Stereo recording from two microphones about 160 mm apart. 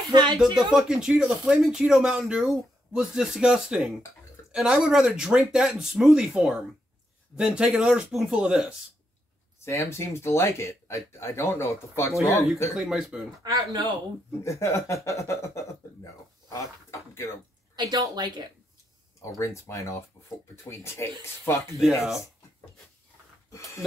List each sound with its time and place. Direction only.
0.1 s a woman's voice: 25° right (ahead or behind)
0.6 s speech: 5° right (ahead or behind)
9.7 s speech: 15° left (ahead or behind)
12.7 s speech: 5° right (ahead or behind)
13.4 s a woman's voice: 25° right (ahead or behind)
14.4 s speech: 20° left (ahead or behind)
17.7 s a woman's voice: 25° right (ahead or behind)
19.2 s speech: 20° left (ahead or behind)